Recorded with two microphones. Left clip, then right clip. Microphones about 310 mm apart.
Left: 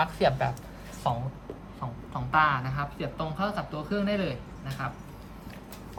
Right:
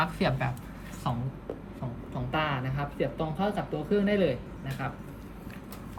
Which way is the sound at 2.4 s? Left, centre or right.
Centre.